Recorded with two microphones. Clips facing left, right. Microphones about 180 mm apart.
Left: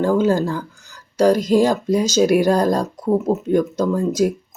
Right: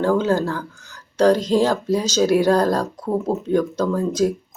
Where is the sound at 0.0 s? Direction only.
10° left (ahead or behind).